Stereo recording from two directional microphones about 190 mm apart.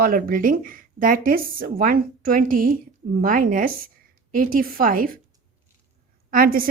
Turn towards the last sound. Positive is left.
turn(degrees=-50)  # may be behind; listen again after turning